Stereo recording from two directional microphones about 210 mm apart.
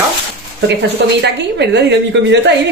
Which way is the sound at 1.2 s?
55° right (ahead or behind).